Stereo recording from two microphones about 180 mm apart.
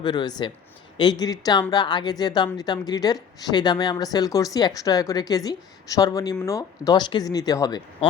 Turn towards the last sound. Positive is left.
turn(degrees=20)  # may be behind; listen again after turning